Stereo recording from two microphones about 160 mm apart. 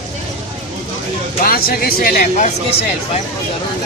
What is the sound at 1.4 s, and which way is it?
Speech, 70° left (ahead or behind).